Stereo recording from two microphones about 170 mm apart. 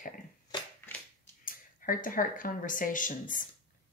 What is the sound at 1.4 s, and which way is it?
Speech, 55° left (ahead or behind).